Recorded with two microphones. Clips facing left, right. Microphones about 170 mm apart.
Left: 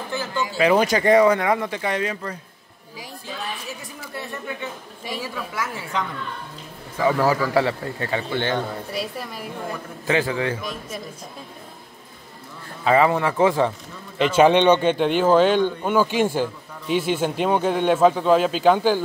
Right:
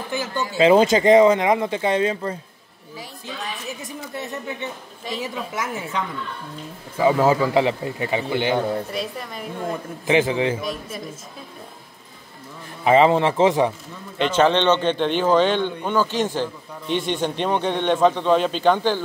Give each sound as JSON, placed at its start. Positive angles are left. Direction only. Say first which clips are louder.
{"t": 0.1, "sound": "a sound", "louder": "right 2 dB", "side_deg": -20}
{"t": 0.6, "sound": "speech", "louder": "right 4 dB", "side_deg": -25}
{"t": 3.8, "sound": "speech", "louder": "right 3 dB", "side_deg": -20}
{"t": 7.0, "sound": "a man's voice", "louder": "right 2 dB", "side_deg": -20}
{"t": 8.9, "sound": "a woman's voice", "louder": "even", "side_deg": 5}
{"t": 10.0, "sound": "speech", "louder": "right 3 dB", "side_deg": -20}
{"t": 10.6, "sound": "a woman's voice", "louder": "right 3 dB", "side_deg": 0}
{"t": 12.8, "sound": "speech", "louder": "right 3 dB", "side_deg": -20}
{"t": 14.1, "sound": "speech", "louder": "left 2 dB", "side_deg": 5}